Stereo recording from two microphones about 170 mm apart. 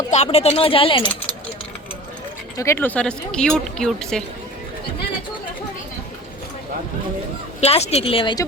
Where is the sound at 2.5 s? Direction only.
15° left (ahead or behind).